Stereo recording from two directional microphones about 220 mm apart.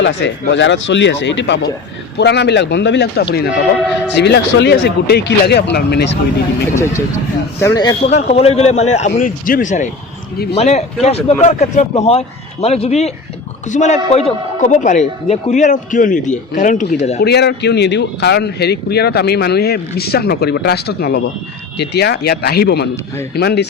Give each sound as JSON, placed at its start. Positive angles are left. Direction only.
{"t": 0.0, "sound": "speech", "side_deg": 55}
{"t": 6.7, "sound": "a man's voice", "side_deg": 10}
{"t": 8.1, "sound": "speech", "side_deg": 30}
{"t": 17.2, "sound": "speech", "side_deg": 50}